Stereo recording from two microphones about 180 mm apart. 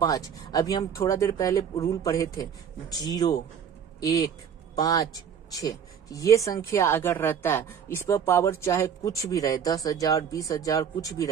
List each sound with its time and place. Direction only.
0.0 s a woman's voice: 20° left (ahead or behind)